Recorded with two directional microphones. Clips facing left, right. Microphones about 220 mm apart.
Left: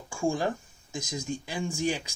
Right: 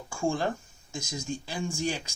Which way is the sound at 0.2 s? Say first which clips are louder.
Left 1 dB; 10° left (ahead or behind).